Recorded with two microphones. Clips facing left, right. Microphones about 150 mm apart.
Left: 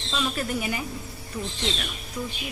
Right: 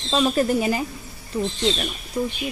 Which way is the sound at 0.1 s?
35° right (ahead or behind).